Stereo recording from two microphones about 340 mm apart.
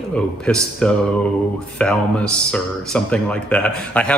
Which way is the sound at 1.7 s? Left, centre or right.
Centre.